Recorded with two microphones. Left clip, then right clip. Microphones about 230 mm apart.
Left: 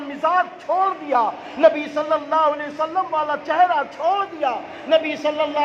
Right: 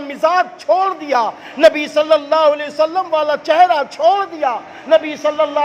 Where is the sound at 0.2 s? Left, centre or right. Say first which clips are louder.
Right 5 dB; right.